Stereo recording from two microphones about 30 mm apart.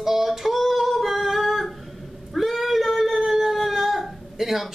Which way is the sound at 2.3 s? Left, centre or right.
Centre.